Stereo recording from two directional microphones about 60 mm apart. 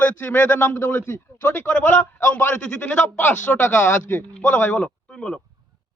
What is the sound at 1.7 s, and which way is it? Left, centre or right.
A woman's voice, left.